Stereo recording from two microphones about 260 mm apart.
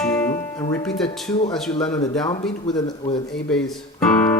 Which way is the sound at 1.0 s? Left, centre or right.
Left.